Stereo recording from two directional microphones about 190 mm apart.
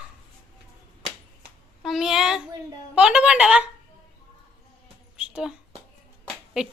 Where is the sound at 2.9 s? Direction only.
5° right (ahead or behind).